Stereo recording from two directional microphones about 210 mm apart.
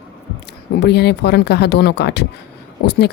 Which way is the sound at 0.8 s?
50° left (ahead or behind).